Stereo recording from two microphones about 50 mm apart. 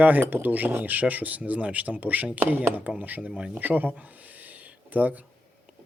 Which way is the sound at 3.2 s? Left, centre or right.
Centre.